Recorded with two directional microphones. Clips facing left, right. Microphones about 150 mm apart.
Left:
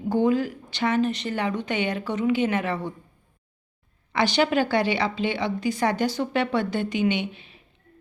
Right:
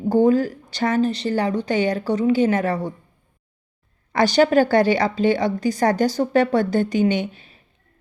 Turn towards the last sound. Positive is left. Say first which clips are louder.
# right 4 dB
turn(degrees=-40)  # may be behind; listen again after turning